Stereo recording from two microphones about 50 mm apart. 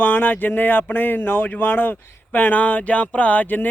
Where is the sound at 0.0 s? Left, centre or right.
Left.